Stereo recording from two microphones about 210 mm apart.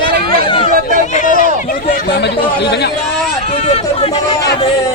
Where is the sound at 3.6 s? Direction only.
25° left (ahead or behind).